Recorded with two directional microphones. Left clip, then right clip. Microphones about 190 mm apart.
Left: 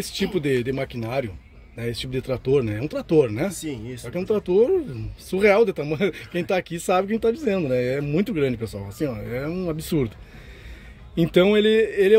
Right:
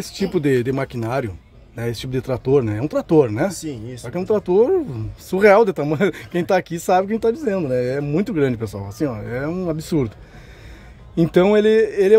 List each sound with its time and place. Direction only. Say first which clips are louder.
0.0 s speech: right 4 dB; 15° right (ahead or behind)
9.0 s speech: right 4 dB; centre (ahead or behind)
9.3 s speech: right 4 dB; 15° right (ahead or behind)
11.1 s speech: right 3 dB; 10° right (ahead or behind)